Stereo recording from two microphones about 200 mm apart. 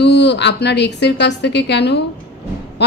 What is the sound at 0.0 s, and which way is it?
A woman's voice, 60° left (ahead or behind).